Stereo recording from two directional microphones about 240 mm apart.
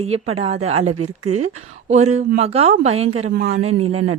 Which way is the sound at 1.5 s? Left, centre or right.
Right.